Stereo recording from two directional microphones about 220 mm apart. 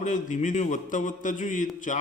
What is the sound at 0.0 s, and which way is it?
A man's voice, 35° left (ahead or behind).